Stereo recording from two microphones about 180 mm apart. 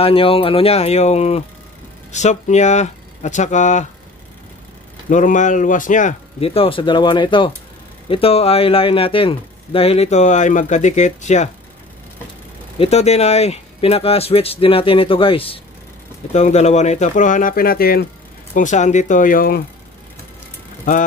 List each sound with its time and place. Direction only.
0.0 s speech: 30° left (ahead or behind)
5.1 s speech: 45° left (ahead or behind)
6.4 s speech: 30° left (ahead or behind)
12.7 s speech: 35° left (ahead or behind); by 18.0 s 55° left (ahead or behind)
18.5 s speech: 45° left (ahead or behind)
20.9 s speech: 45° left (ahead or behind)